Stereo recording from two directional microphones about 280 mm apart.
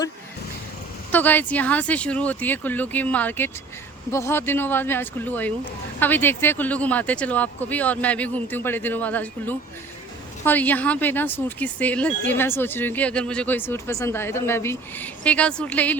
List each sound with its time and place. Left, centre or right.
1.1 s speech: centre